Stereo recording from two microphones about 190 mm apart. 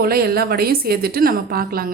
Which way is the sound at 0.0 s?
55° right (ahead or behind).